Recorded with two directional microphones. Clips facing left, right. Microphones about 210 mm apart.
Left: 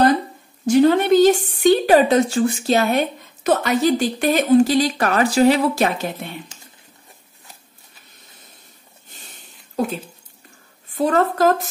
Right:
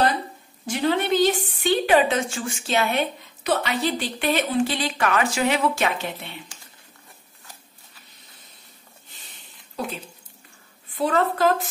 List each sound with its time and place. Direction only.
0.7 s a woman's voice: 45° left (ahead or behind)
10.9 s a woman's voice: 45° left (ahead or behind)